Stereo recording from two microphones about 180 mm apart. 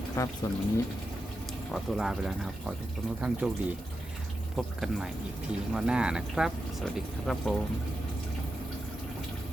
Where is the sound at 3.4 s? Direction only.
5° right (ahead or behind).